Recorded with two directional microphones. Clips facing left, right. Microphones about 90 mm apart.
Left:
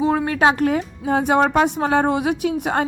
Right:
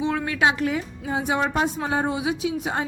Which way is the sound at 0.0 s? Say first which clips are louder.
Left 5 dB; 40° left (ahead or behind).